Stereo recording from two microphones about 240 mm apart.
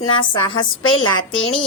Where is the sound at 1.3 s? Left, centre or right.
Left.